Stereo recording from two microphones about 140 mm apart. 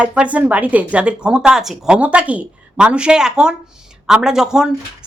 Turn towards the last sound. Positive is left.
turn(degrees=-5)  # may be behind; listen again after turning